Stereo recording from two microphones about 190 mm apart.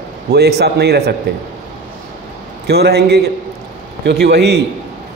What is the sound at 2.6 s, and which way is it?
A man's voice, 60° right (ahead or behind).